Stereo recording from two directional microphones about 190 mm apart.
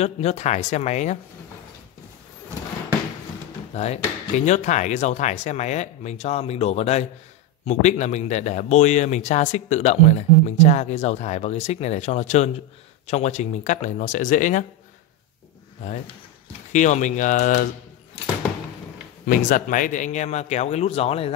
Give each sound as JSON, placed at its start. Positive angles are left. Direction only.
{"t": 0.0, "sound": "speech", "side_deg": 35}
{"t": 3.7, "sound": "speech", "side_deg": 35}
{"t": 16.7, "sound": "speech", "side_deg": 40}
{"t": 19.2, "sound": "speech", "side_deg": 50}